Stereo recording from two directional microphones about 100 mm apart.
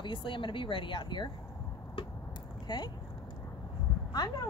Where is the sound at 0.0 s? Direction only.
55° left (ahead or behind).